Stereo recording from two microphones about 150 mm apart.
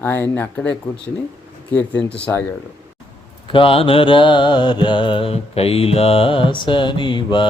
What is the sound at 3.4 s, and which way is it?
Mantra, 35° left (ahead or behind).